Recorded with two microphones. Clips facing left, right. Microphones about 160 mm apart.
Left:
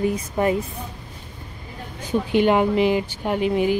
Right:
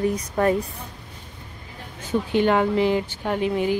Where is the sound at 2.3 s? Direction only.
15° left (ahead or behind).